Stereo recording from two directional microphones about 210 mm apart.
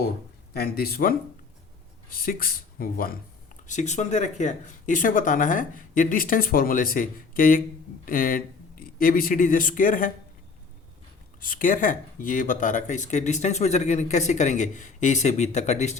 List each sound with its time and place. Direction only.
0.5 s speech: 45° left (ahead or behind)
2.1 s speech: 45° left (ahead or behind)
11.3 s speech: 40° left (ahead or behind)